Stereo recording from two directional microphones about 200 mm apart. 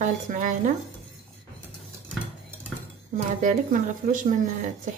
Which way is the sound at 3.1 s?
40° right (ahead or behind).